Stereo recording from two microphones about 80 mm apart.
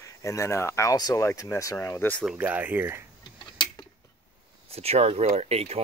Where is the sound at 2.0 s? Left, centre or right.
Left.